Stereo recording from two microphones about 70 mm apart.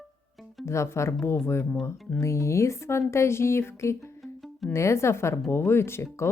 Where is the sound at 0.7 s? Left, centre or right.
Left.